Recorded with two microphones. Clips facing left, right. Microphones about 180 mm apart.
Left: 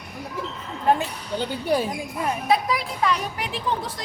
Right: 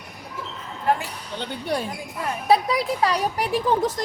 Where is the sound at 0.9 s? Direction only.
25° left (ahead or behind).